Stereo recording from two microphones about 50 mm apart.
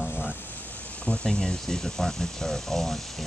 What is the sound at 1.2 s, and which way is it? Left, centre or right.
Speech, centre.